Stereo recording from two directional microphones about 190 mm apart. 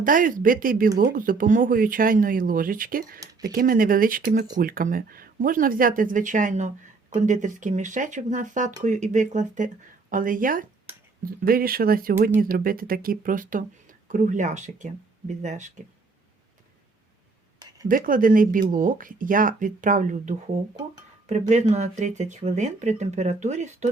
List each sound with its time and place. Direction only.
0.0 s speech: 45° right (ahead or behind)
17.8 s speech: 45° right (ahead or behind)